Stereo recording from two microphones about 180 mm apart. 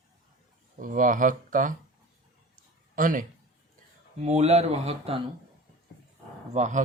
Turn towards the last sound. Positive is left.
turn(degrees=-40)  # may be behind; listen again after turning